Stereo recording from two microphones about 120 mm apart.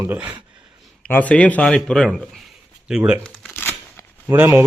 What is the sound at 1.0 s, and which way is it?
Speech, 10° left (ahead or behind).